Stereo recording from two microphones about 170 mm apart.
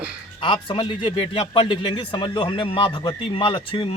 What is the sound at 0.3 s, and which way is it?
Speech, 30° left (ahead or behind).